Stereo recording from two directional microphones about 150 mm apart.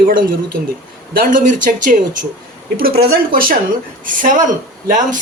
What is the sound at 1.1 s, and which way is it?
Speech, 70° right (ahead or behind).